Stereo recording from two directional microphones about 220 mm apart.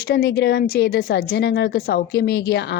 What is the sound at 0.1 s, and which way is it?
A woman's voice, 45° left (ahead or behind).